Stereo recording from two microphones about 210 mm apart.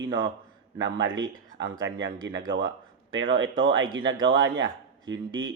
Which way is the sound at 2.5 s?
60° right (ahead or behind).